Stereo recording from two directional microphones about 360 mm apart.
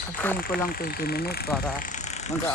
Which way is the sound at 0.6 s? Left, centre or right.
Left.